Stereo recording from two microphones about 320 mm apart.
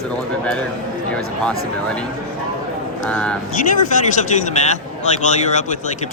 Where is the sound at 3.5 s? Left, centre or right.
Left.